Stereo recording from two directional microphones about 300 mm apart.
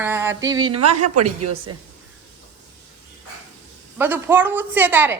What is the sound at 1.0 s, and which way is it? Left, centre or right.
Speech, right.